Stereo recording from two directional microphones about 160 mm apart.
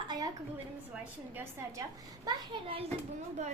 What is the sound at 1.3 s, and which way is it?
Speech, 15° right (ahead or behind).